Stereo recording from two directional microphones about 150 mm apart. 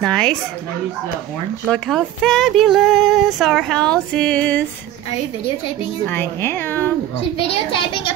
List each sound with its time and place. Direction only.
0.0 s speech: 5° left (ahead or behind)
1.7 s speech: 5° left (ahead or behind)
6.0 s a woman's voice: 15° left (ahead or behind)
7.3 s a child's voice: 35° left (ahead or behind)